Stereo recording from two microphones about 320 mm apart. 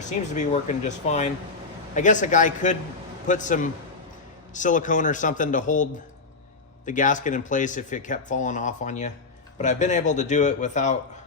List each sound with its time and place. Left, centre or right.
0.3 s speech: left